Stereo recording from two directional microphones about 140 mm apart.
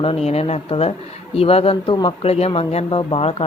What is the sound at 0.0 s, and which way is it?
Speech, 45° left (ahead or behind).